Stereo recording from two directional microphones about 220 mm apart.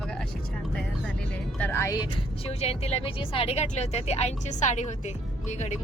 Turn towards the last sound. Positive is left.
turn(degrees=30)  # may be behind; listen again after turning